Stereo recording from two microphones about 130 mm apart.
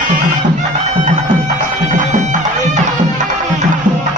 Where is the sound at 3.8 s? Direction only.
80° right.